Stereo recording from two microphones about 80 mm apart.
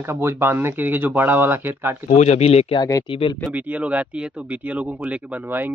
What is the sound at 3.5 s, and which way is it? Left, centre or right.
Speech, centre.